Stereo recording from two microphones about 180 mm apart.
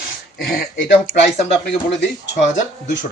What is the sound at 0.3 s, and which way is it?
Speech, 55° left (ahead or behind).